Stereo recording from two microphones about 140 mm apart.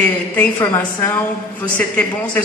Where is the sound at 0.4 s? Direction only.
20° left (ahead or behind).